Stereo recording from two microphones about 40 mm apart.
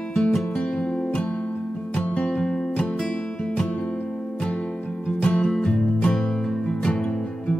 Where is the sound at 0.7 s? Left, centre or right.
Left.